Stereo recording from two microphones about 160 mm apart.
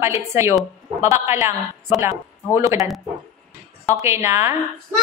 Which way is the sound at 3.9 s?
15° right (ahead or behind).